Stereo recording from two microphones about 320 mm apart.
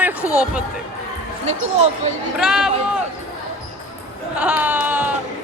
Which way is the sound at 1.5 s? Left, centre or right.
Right.